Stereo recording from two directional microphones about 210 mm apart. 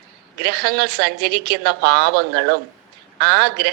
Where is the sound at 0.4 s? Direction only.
50° right (ahead or behind).